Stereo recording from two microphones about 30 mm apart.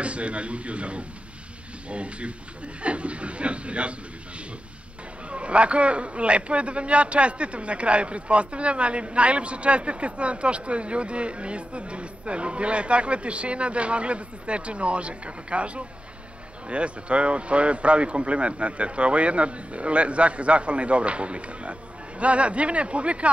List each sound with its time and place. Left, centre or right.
0.0 s speech: right
5.3 s a man's voice: right